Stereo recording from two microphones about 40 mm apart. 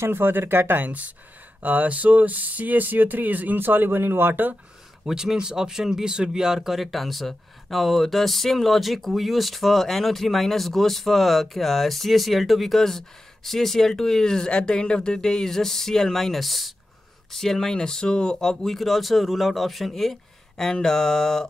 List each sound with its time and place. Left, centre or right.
0.0 s speech: right
0.8 s speech: right
3.5 s speech: right
5.0 s speech: centre
18.8 s speech: centre